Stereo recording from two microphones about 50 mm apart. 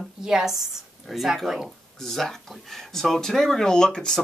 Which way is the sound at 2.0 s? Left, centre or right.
Centre.